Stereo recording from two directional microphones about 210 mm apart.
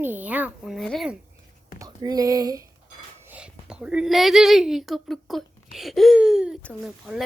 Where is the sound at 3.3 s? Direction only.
5° right (ahead or behind).